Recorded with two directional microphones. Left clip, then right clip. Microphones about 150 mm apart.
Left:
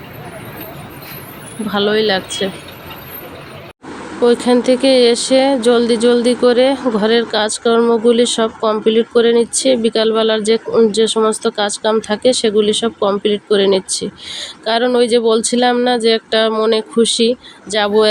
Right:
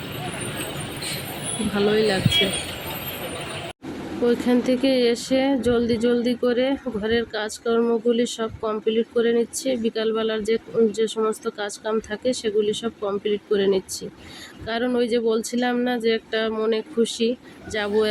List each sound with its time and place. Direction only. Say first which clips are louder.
1.7 s speech: left 6 dB; 20° left (ahead or behind)
4.2 s speech: left 9 dB; 25° left (ahead or behind)